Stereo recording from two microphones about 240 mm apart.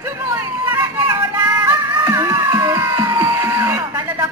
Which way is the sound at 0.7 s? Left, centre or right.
Centre.